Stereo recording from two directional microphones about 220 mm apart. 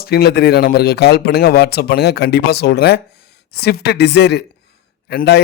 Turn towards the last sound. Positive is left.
turn(degrees=50)  # may be behind; listen again after turning